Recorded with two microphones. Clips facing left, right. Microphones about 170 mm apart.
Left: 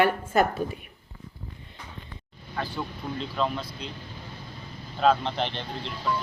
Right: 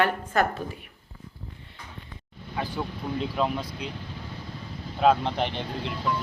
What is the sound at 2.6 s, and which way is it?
Speech, 10° right (ahead or behind).